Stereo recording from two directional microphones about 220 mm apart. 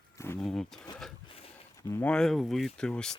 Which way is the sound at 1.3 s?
25° left (ahead or behind).